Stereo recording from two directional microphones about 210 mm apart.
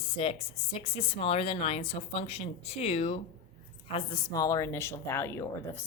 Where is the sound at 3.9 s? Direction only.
20° left (ahead or behind).